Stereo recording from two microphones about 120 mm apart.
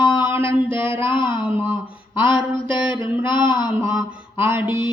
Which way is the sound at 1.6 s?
20° right (ahead or behind).